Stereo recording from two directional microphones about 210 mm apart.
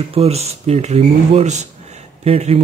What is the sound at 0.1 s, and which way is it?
Speech, 30° right (ahead or behind).